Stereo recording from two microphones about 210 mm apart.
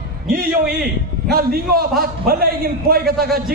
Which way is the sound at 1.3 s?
45° right (ahead or behind).